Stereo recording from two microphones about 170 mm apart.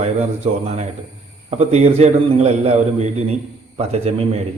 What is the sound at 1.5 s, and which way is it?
A man's voice, 40° right (ahead or behind).